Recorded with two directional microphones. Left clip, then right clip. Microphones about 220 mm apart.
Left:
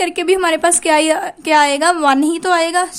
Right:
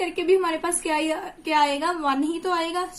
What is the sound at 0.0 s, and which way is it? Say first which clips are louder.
A woman's voice: left 7 dB; 45° left (ahead or behind).